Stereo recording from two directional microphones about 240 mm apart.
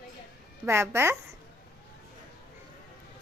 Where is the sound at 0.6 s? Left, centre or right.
Centre.